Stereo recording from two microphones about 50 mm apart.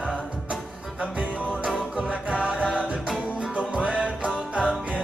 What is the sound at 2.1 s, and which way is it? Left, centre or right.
Music, centre.